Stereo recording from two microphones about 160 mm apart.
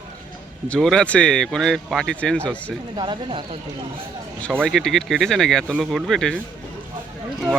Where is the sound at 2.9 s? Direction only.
30° right (ahead or behind).